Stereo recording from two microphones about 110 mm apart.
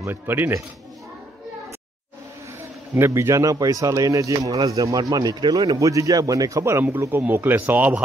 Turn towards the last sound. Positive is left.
turn(degrees=-15)  # may be behind; listen again after turning